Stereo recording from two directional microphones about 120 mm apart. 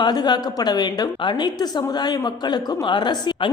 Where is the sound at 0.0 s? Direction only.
35° left (ahead or behind).